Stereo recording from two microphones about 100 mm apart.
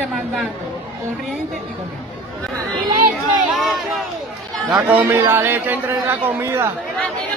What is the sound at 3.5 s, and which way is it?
Speech, centre (ahead or behind).